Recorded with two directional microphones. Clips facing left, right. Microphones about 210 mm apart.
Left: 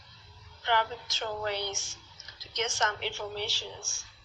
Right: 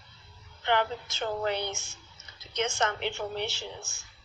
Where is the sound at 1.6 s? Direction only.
55° right (ahead or behind).